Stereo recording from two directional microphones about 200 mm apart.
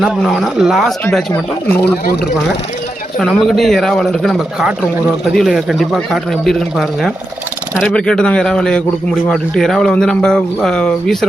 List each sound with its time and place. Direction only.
0.0 s speech: centre (ahead or behind)
1.8 s speech: 55° left (ahead or behind)
3.2 s speech: centre (ahead or behind)